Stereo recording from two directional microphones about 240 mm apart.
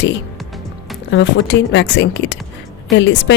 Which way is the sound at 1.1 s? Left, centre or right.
Left.